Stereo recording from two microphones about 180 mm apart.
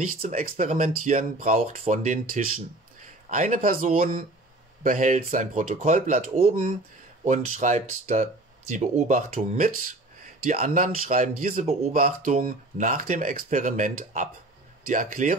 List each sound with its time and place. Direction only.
0.2 s speech: 45° right (ahead or behind)